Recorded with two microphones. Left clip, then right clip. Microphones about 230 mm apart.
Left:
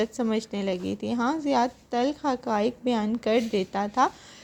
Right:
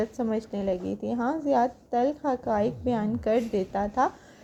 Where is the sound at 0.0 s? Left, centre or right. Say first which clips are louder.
Left 2 dB; left.